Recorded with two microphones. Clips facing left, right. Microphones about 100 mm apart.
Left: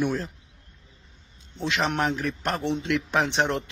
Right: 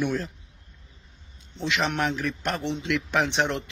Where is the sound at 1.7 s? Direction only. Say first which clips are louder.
Left 1 dB; 35° left (ahead or behind).